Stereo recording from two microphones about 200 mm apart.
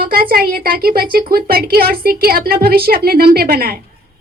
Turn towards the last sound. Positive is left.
turn(degrees=-50)  # may be behind; listen again after turning